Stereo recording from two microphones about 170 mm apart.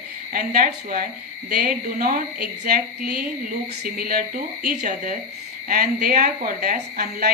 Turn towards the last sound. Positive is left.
turn(degrees=-60)  # may be behind; listen again after turning